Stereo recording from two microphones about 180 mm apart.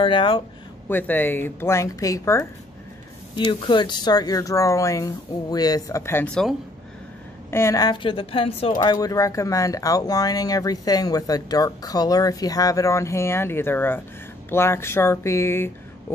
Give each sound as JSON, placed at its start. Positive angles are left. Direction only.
{"t": 0.0, "sound": "speech", "side_deg": 30}
{"t": 0.8, "sound": "speech", "side_deg": 10}
{"t": 7.5, "sound": "speech", "side_deg": 15}